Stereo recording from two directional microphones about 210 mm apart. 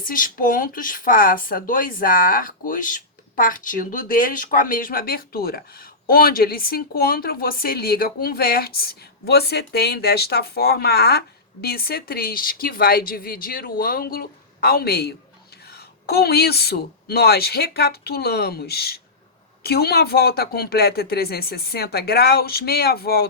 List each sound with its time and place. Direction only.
0.0 s speech: 40° left (ahead or behind)